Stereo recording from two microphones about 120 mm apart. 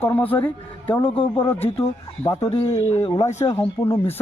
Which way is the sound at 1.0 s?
45° left (ahead or behind).